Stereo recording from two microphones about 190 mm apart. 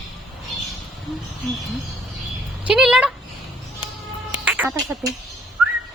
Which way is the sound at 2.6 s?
5° right (ahead or behind).